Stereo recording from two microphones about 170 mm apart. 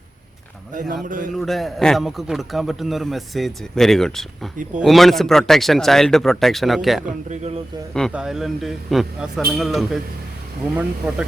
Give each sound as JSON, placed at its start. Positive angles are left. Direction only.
{"t": 1.0, "sound": "a man's voice", "side_deg": -50}
{"t": 1.3, "sound": "a man's voice", "side_deg": 0}
{"t": 7.3, "sound": "speech", "side_deg": -40}
{"t": 8.1, "sound": "a man's voice", "side_deg": -5}